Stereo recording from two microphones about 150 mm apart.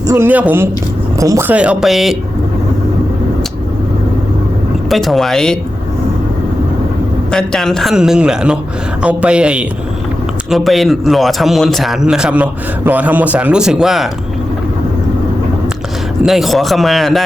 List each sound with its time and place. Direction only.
0.1 s speech: 15° right (ahead or behind)
1.5 s a man's voice: 10° right (ahead or behind)
4.9 s a man's voice: centre (ahead or behind)
7.3 s a man's voice: 5° left (ahead or behind)
16.2 s a man's voice: centre (ahead or behind)